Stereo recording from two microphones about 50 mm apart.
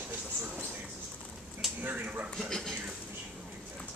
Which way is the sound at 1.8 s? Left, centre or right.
Right.